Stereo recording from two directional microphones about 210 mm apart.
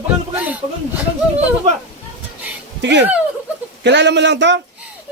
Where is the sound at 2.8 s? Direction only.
55° right (ahead or behind).